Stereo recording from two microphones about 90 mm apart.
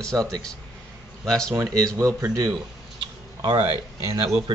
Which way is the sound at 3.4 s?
90° right.